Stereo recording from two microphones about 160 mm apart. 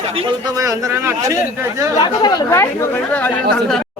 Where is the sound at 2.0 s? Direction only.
25° left (ahead or behind).